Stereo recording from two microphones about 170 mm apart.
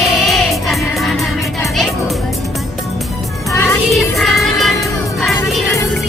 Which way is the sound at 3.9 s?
Centre (ahead or behind).